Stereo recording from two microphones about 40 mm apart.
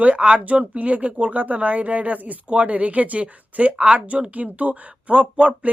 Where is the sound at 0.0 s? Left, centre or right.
Right.